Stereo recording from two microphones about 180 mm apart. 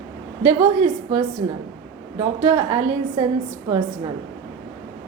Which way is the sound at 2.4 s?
20° right (ahead or behind).